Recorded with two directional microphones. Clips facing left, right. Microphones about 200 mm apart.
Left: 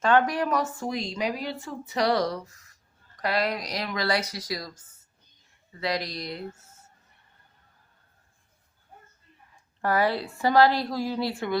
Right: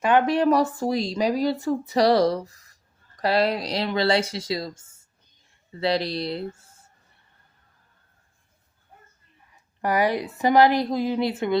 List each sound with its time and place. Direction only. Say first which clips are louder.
0.0 s a woman's voice: right 3 dB; 20° right (ahead or behind)
9.8 s a woman's voice: right 2 dB; 15° right (ahead or behind)